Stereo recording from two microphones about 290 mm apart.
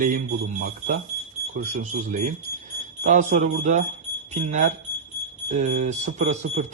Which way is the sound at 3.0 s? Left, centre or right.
Right.